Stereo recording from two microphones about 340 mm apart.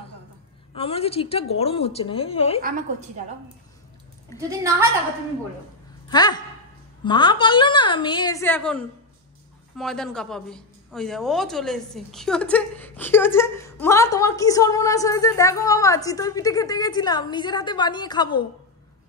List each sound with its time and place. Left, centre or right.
0.7 s a woman's voice: centre
4.4 s a woman's voice: centre
6.0 s a woman's voice: centre